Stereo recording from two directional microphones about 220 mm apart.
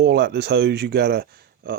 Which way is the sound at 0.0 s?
50° right (ahead or behind).